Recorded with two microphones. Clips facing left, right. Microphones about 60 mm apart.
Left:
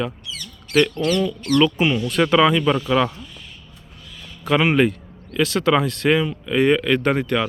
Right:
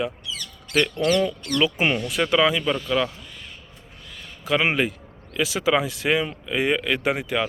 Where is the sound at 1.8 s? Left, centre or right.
Right.